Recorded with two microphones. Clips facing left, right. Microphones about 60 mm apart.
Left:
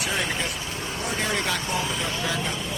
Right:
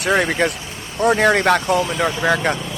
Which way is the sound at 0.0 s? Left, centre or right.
Right.